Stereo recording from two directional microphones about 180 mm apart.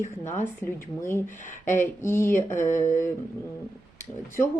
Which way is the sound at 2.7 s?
45° left (ahead or behind).